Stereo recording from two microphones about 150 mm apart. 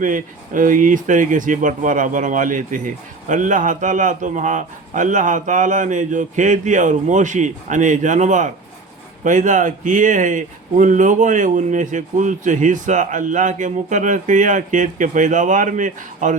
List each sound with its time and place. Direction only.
0.0 s speech: 60° right (ahead or behind)